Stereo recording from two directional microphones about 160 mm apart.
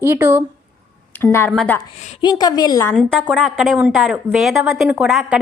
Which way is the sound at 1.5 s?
5° left (ahead or behind).